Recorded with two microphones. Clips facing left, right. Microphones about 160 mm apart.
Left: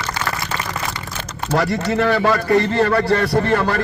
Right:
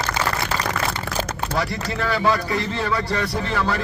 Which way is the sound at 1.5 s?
60° left (ahead or behind).